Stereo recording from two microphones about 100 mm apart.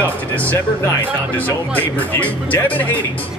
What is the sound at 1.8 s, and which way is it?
Speech, 15° left (ahead or behind).